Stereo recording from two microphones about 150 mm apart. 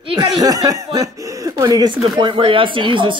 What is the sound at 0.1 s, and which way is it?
Speech, 25° right (ahead or behind).